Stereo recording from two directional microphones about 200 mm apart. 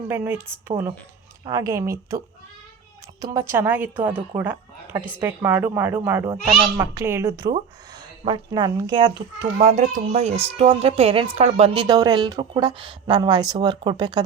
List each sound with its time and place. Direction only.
0.1 s a woman's voice: 10° right (ahead or behind)